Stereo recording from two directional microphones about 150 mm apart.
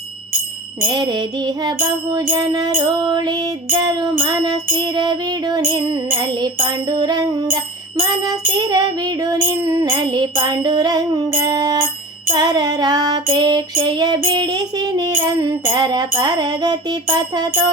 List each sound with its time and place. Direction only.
0.9 s music: 30° right (ahead or behind)